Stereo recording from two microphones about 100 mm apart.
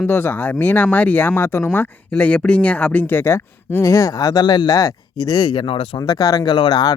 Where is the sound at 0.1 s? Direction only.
25° left (ahead or behind); by 5.6 s 45° left (ahead or behind).